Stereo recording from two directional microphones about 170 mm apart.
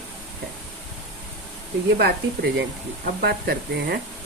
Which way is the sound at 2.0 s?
70° right (ahead or behind).